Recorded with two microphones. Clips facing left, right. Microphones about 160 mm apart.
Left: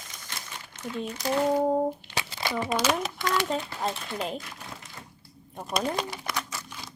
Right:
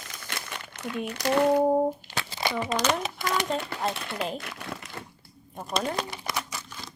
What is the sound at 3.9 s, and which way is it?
Speech, 65° right (ahead or behind).